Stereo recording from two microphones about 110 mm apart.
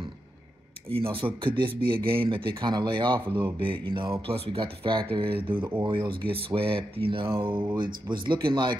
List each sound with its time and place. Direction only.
0.8 s speech: 55° right (ahead or behind)